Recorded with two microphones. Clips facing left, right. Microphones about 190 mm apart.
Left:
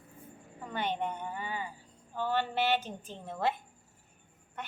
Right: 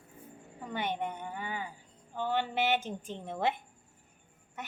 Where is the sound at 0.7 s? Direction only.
15° right (ahead or behind).